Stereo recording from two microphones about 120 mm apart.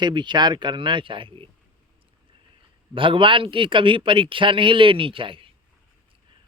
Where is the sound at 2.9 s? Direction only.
45° right (ahead or behind).